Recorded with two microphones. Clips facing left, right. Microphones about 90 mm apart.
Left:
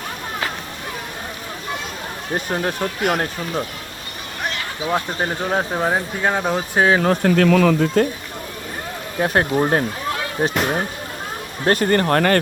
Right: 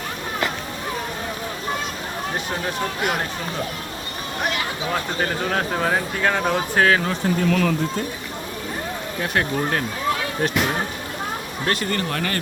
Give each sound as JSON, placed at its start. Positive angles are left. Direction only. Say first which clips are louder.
{"t": 4.9, "sound": "speech", "louder": "left 4 dB", "side_deg": 15}
{"t": 7.0, "sound": "speech", "louder": "left 7 dB", "side_deg": 45}
{"t": 7.3, "sound": "speech", "louder": "left 5 dB", "side_deg": 90}
{"t": 9.1, "sound": "speech", "louder": "left 6 dB", "side_deg": 30}